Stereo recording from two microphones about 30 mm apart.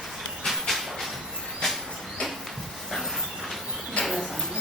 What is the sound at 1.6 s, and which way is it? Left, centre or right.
Vehicle, centre.